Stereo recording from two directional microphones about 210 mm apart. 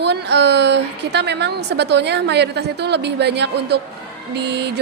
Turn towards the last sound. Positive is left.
turn(degrees=-55)  # may be behind; listen again after turning